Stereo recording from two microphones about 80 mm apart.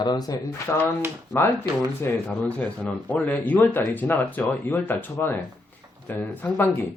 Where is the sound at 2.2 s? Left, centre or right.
Centre.